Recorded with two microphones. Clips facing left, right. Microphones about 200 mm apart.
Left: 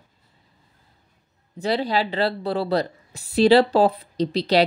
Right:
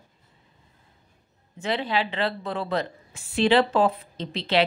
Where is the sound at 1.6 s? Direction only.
40° left (ahead or behind).